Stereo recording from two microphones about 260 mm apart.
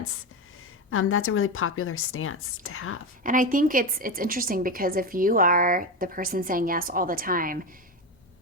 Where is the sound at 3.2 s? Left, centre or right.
Right.